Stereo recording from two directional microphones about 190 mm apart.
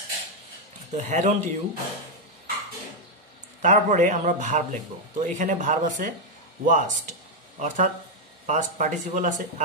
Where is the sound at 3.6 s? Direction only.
40° right (ahead or behind).